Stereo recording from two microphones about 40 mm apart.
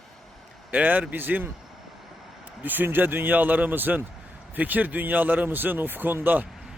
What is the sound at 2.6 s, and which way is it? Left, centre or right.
Speech, right.